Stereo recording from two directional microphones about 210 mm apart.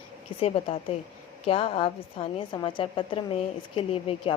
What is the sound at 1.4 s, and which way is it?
A woman's voice, 25° left (ahead or behind).